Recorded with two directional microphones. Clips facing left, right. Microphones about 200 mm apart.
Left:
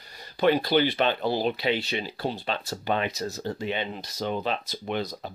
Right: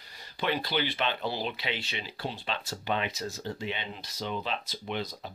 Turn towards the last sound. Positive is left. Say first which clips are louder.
# left 5 dB
turn(degrees=45)  # may be behind; listen again after turning